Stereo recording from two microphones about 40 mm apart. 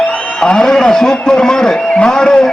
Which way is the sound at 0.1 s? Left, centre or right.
Left.